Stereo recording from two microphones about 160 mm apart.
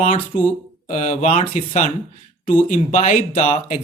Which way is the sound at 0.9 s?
45° left (ahead or behind).